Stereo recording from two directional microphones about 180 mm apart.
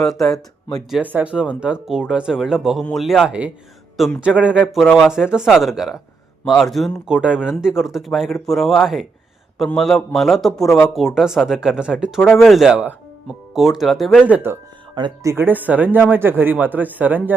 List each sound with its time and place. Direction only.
0.0 s speech: centre (ahead or behind)
14.9 s speech: 20° right (ahead or behind)